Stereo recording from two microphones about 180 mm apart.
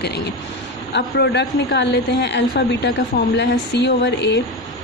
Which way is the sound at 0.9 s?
70° left (ahead or behind).